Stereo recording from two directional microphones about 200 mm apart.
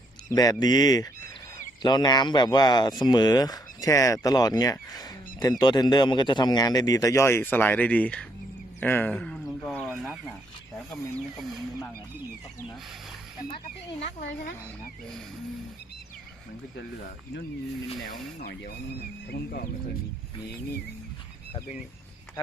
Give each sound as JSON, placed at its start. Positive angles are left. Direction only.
{"t": 0.3, "sound": "speech", "side_deg": 20}
{"t": 8.8, "sound": "a sound", "side_deg": 10}
{"t": 13.5, "sound": "speech", "side_deg": 30}
{"t": 19.3, "sound": "speech", "side_deg": 50}